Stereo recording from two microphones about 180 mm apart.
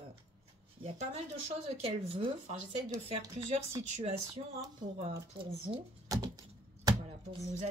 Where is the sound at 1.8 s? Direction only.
35° right (ahead or behind).